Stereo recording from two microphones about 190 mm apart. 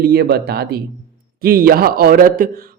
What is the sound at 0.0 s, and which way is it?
A man's voice, 55° right (ahead or behind).